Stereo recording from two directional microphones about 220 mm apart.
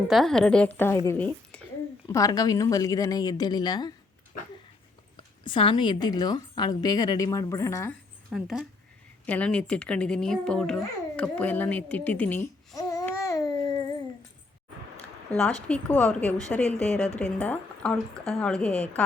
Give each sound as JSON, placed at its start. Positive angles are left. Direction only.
{"t": 0.1, "sound": "a woman's voice", "side_deg": 0}
{"t": 5.1, "sound": "a woman's voice", "side_deg": 20}
{"t": 8.3, "sound": "a woman's voice", "side_deg": 0}
{"t": 15.7, "sound": "a woman's voice", "side_deg": 5}